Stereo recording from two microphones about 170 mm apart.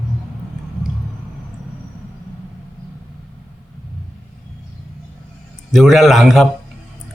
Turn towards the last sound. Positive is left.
turn(degrees=0)  # may be behind; listen again after turning